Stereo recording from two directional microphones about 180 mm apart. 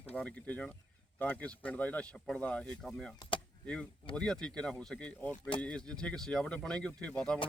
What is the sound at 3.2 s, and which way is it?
Speech, 30° left (ahead or behind).